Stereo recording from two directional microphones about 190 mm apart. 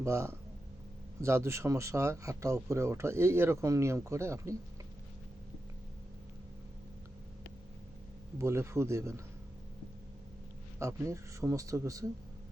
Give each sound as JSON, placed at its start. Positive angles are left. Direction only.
{"t": 0.0, "sound": "speech", "side_deg": -15}
{"t": 8.4, "sound": "speech", "side_deg": -15}
{"t": 10.8, "sound": "speech", "side_deg": -15}